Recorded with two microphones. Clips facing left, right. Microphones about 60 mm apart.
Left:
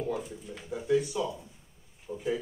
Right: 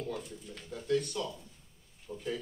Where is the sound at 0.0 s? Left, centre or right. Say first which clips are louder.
Left 5 dB; centre.